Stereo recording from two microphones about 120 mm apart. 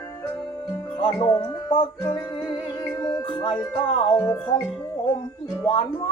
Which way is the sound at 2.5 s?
35° left (ahead or behind).